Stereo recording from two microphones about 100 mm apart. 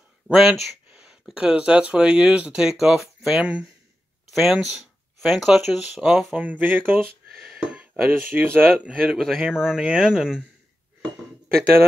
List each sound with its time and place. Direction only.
0.3 s speech: 5° right (ahead or behind); by 7.0 s 20° right (ahead or behind)
7.2 s speech: 5° right (ahead or behind); by 8.9 s 20° right (ahead or behind)
9.1 s speech: centre (ahead or behind)